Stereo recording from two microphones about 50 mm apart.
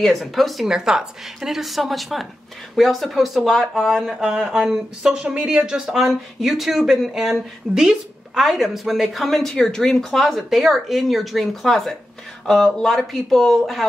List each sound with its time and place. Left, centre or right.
0.0 s speech: centre
0.7 s speech: centre
4.2 s speech: centre